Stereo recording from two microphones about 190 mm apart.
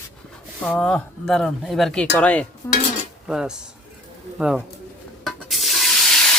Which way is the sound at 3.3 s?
5° right (ahead or behind).